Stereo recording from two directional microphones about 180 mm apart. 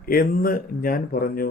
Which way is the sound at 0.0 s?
55° left (ahead or behind).